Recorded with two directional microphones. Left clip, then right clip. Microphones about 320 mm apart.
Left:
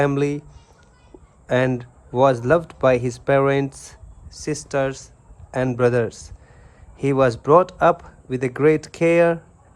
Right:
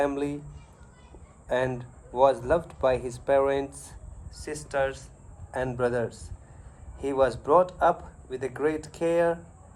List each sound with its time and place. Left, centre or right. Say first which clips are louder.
1.5 s speech: left 7 dB; left